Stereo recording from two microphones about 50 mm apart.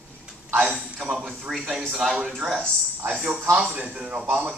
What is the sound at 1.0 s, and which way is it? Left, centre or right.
Speech, centre.